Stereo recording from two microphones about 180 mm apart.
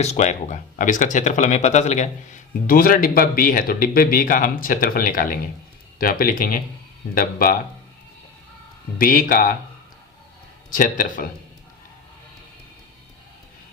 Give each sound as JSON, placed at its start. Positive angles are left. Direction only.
{"t": 0.0, "sound": "speech", "side_deg": 40}
{"t": 9.0, "sound": "speech", "side_deg": 50}
{"t": 10.7, "sound": "speech", "side_deg": 50}